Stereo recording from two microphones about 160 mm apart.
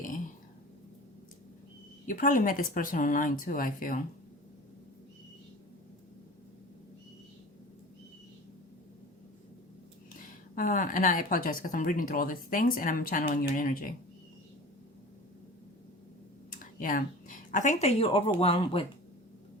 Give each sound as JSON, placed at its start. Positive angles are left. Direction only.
{"t": 2.0, "sound": "a woman's voice", "side_deg": 55}
{"t": 10.2, "sound": "a woman's voice", "side_deg": 55}
{"t": 16.5, "sound": "speech", "side_deg": 60}